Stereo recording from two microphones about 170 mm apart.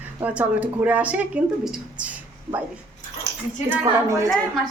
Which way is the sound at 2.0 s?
10° right (ahead or behind).